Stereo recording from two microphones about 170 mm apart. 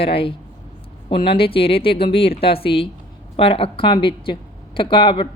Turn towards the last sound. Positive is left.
turn(degrees=30)  # may be behind; listen again after turning